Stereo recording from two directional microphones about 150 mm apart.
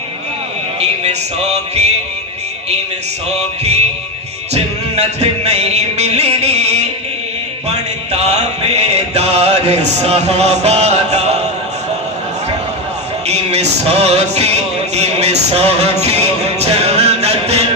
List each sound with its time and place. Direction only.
0.8 s music: 45° right (ahead or behind)
3.2 s music: 45° right (ahead or behind)
13.2 s music: 45° right (ahead or behind)